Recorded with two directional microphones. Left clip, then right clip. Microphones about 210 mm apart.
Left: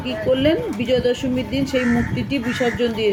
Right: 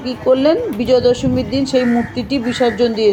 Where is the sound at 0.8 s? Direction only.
10° right (ahead or behind).